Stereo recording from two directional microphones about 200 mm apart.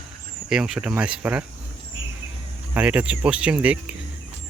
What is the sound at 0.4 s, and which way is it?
Speech, 5° right (ahead or behind).